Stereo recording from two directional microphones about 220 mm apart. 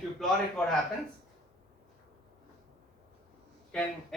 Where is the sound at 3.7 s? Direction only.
5° left (ahead or behind).